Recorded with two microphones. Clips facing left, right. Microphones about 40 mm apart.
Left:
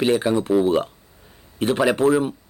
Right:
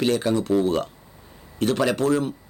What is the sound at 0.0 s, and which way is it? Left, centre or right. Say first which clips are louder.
Speech: left 2 dB; centre.